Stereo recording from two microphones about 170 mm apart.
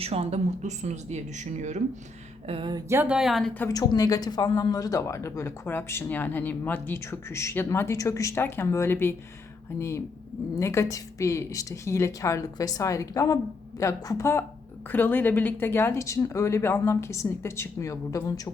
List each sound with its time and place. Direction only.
0.0 s speech: 35° right (ahead or behind)
2.5 s speech: 30° right (ahead or behind)
2.9 s speech: 10° right (ahead or behind)
3.7 s speech: 20° left (ahead or behind)